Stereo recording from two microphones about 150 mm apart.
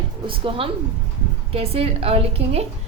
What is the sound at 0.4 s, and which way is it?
A woman's voice, 40° right (ahead or behind).